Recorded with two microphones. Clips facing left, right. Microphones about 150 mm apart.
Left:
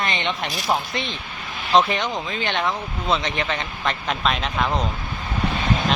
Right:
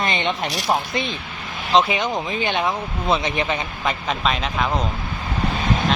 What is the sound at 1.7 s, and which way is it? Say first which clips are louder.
Speech: right 1 dB; 10° right (ahead or behind).